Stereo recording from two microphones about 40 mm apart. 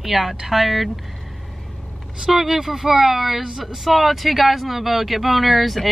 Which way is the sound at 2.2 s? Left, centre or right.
Centre.